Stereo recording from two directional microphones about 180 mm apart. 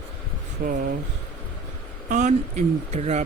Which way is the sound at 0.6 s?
50° right (ahead or behind).